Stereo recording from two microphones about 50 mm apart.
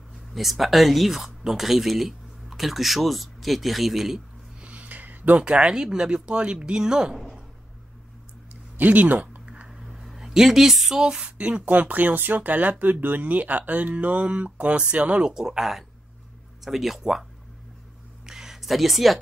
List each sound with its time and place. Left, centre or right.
0.3 s speech: centre
4.6 s a sound: right
5.4 s speech: centre
8.7 s speech: right
9.7 s speech: centre; by 15.3 s right
15.3 s speech: centre
18.2 s a sound: centre